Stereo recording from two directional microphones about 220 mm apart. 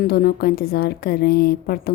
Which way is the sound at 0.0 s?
45° left (ahead or behind).